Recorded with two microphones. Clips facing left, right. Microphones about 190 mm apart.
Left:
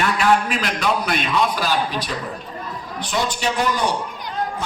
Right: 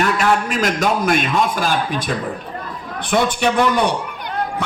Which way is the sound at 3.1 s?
55° right (ahead or behind).